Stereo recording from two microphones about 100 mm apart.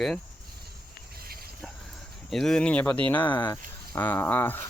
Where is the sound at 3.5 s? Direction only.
20° left (ahead or behind).